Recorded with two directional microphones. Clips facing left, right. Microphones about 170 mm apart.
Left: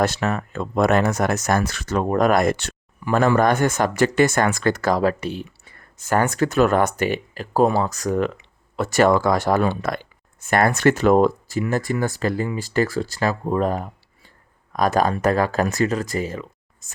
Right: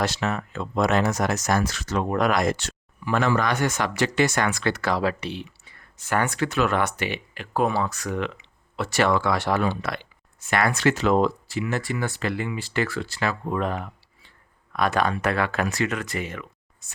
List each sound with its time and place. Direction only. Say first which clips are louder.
0.0 s speech: left 4 dB; 50° left (ahead or behind)